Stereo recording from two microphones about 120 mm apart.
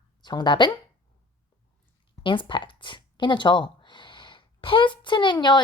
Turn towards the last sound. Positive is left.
turn(degrees=40)  # may be behind; listen again after turning